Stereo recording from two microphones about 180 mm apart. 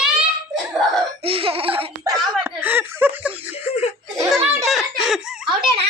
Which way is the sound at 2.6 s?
10° right (ahead or behind).